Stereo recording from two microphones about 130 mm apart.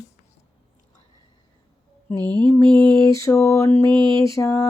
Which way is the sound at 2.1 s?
30° right (ahead or behind).